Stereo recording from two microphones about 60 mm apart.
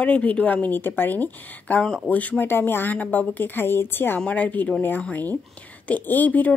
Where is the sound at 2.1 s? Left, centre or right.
Left.